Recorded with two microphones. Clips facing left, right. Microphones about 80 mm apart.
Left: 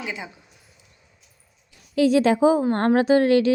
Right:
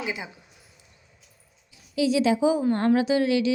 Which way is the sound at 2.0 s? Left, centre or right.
Left.